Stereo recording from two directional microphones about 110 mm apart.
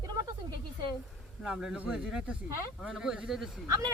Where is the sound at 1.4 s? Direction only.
5° right (ahead or behind).